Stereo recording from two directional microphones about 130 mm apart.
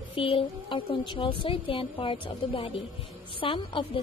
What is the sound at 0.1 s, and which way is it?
A woman's voice, 45° left (ahead or behind).